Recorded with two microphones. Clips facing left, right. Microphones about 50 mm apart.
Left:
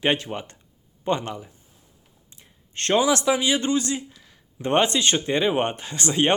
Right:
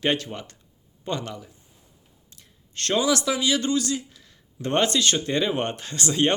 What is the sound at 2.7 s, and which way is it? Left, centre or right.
Speech, left.